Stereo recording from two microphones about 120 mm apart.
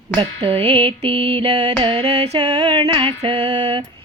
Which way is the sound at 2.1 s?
60° right (ahead or behind).